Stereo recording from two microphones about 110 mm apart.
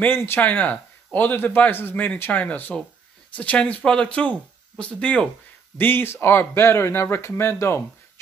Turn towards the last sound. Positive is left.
turn(degrees=25)  # may be behind; listen again after turning